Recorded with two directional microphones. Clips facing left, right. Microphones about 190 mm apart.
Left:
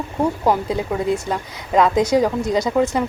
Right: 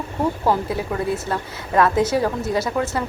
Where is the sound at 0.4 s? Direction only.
15° left (ahead or behind).